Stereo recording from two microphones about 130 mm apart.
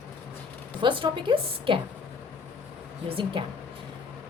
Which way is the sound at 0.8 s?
40° right (ahead or behind).